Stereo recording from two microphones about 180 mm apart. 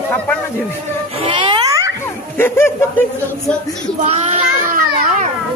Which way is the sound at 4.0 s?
40° right (ahead or behind).